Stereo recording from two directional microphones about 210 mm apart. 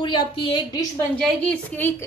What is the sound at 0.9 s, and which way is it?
A woman's voice, 5° left (ahead or behind).